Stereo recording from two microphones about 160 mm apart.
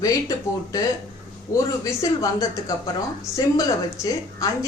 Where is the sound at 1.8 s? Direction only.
20° left (ahead or behind).